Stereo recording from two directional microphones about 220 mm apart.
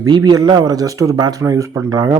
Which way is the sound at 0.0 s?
15° right (ahead or behind).